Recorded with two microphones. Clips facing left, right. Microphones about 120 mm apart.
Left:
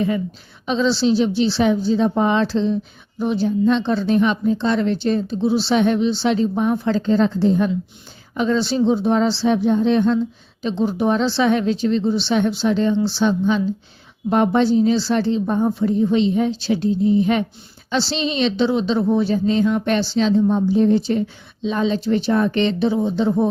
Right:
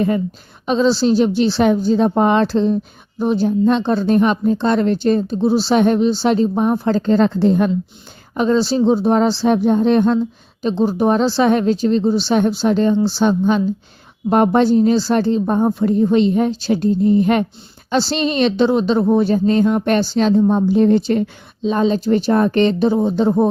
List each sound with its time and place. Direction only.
0.6 s a woman's voice: 45° right (ahead or behind); by 7.7 s 60° right (ahead or behind)
8.4 s a woman's voice: 35° right (ahead or behind); by 21.2 s 55° right (ahead or behind)
21.6 s a woman's voice: 40° right (ahead or behind)